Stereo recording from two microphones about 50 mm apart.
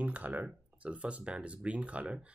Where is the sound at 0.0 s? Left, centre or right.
Right.